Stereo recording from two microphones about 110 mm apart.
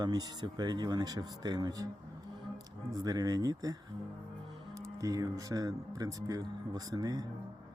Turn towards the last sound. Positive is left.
turn(degrees=-35)  # may be behind; listen again after turning